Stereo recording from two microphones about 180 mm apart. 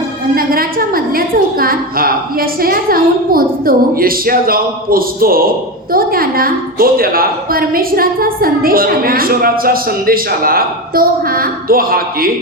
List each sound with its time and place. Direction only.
0.3 s a woman's voice: 55° right (ahead or behind)